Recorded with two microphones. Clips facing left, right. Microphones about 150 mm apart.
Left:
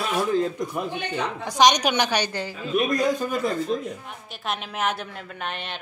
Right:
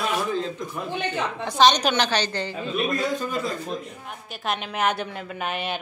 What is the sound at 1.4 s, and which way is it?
A woman's voice, 15° left (ahead or behind).